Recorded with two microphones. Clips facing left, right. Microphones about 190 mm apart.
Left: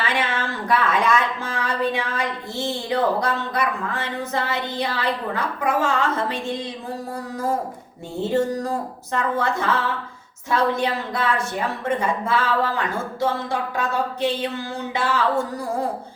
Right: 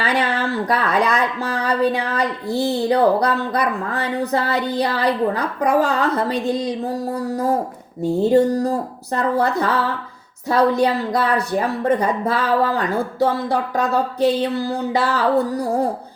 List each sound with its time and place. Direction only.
0.0 s speech: 35° right (ahead or behind)
8.3 s speech: 35° right (ahead or behind)